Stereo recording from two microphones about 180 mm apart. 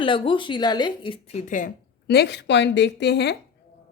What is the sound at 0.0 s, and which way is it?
Speech, 30° left (ahead or behind).